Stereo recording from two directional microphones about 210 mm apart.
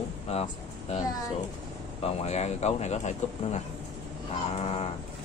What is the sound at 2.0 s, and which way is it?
Speech, 30° left (ahead or behind).